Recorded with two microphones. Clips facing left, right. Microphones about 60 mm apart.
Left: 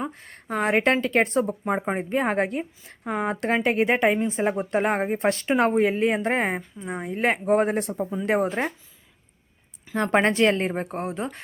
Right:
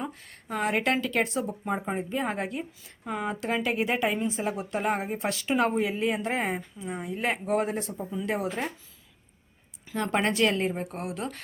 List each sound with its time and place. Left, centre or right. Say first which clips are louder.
0.0 s speech: left 4 dB; left
3.0 s speech: left 5 dB; left
3.5 s speech: left 6 dB; left
7.8 s speech: left 7 dB; left
8.3 s speech: left 7 dB; left
9.9 s speech: left 6 dB; left